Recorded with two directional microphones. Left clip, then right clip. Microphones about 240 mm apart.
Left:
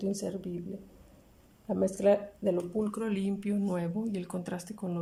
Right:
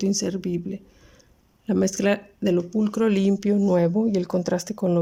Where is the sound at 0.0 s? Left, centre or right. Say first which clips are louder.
Right 9 dB; right.